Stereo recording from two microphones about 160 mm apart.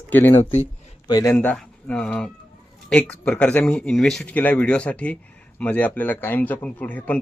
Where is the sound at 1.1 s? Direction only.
25° left (ahead or behind).